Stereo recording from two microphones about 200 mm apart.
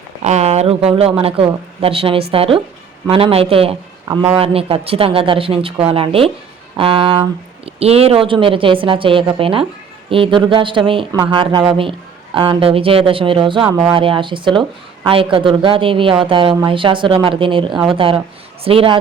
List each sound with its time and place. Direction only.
0.2 s speech: 35° right (ahead or behind)
13.7 s speech: 15° right (ahead or behind)
13.9 s speech: 25° right (ahead or behind)